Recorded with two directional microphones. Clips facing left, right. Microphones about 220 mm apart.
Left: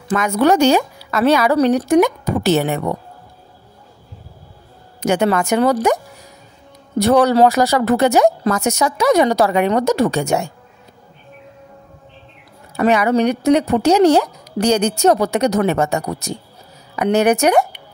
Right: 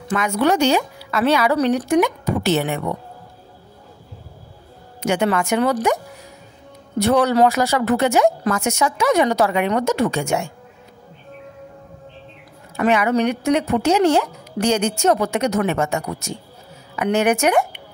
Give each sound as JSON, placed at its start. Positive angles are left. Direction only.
{"t": 0.1, "sound": "speech", "side_deg": 45}
{"t": 5.0, "sound": "speech", "side_deg": 40}
{"t": 7.0, "sound": "speech", "side_deg": 40}
{"t": 12.7, "sound": "speech", "side_deg": 35}